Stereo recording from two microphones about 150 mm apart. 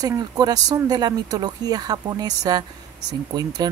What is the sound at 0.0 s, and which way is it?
Speech, 25° right (ahead or behind).